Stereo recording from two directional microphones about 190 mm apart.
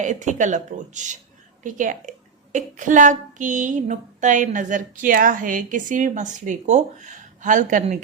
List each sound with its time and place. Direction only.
0.0 s speech: 40° right (ahead or behind)